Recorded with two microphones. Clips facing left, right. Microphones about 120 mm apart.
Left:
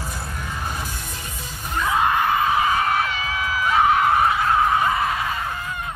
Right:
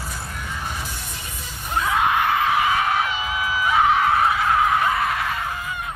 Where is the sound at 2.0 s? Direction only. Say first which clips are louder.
Left 1 dB; 5° right (ahead or behind).